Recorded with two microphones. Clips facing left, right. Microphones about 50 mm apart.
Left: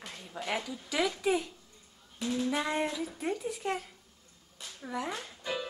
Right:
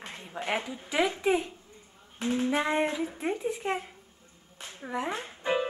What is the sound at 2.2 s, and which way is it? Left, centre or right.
Speech, right.